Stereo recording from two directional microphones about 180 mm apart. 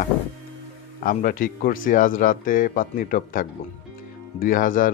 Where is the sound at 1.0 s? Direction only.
50° left (ahead or behind).